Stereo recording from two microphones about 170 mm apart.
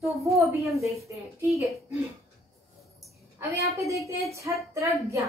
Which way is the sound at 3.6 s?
20° right (ahead or behind).